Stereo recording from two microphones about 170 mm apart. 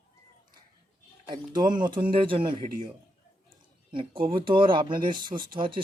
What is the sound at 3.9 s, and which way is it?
Speech, 30° right (ahead or behind).